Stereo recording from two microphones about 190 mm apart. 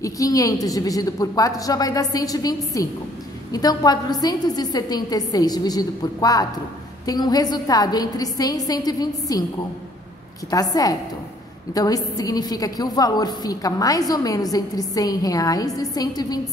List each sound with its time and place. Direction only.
0.0 s a woman's voice: 20° left (ahead or behind)
10.5 s a woman's voice: 20° left (ahead or behind)